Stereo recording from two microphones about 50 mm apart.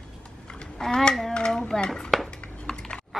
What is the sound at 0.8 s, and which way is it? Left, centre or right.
A child's voice, centre.